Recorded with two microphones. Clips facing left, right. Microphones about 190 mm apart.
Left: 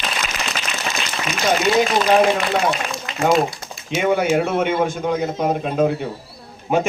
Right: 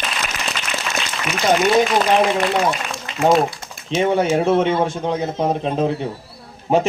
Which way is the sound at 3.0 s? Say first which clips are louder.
Right 2 dB; 25° right (ahead or behind).